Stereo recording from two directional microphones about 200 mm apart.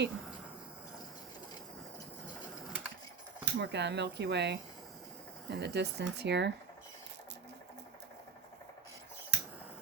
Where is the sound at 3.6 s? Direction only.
60° right (ahead or behind).